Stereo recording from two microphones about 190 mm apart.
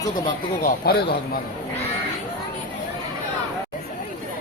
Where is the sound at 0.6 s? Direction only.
50° left (ahead or behind).